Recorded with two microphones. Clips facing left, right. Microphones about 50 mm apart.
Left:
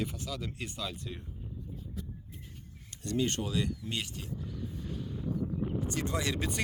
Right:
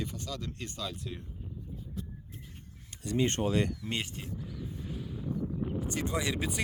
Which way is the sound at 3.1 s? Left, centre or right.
Right.